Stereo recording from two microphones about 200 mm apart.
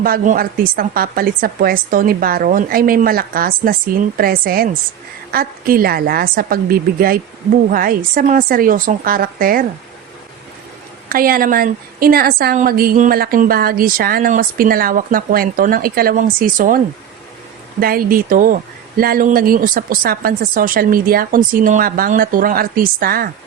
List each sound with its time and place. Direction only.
0.0 s a woman's voice: 45° right (ahead or behind)
11.1 s a woman's voice: 45° right (ahead or behind)